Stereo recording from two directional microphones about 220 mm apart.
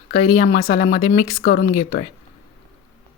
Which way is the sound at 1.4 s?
40° left (ahead or behind).